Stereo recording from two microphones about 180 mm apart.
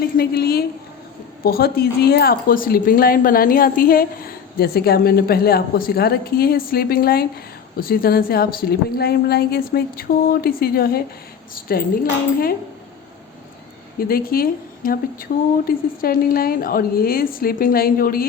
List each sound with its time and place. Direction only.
0.2 s speech: 60° left (ahead or behind)
14.0 s speech: 55° left (ahead or behind)